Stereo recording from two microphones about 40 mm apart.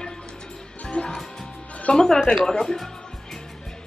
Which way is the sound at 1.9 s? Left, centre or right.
Centre.